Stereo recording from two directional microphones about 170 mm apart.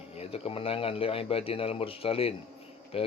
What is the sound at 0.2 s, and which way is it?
Speech, 35° left (ahead or behind).